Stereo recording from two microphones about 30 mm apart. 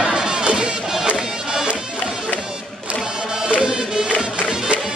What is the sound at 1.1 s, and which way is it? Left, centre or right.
Music, centre.